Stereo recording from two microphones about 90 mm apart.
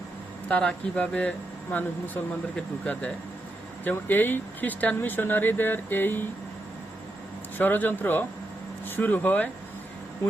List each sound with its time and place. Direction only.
0.4 s speech: 15° left (ahead or behind)
7.6 s speech: 20° left (ahead or behind)